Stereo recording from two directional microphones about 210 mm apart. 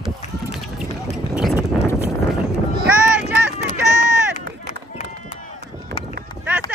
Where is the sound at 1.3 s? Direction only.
5° right (ahead or behind).